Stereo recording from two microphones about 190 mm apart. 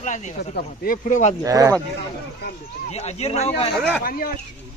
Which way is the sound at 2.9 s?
35° left (ahead or behind).